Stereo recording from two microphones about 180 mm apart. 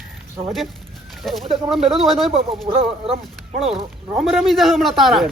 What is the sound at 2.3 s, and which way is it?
Speech, 30° right (ahead or behind).